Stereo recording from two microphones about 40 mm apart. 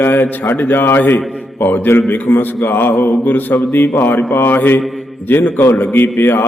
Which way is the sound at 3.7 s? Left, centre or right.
Left.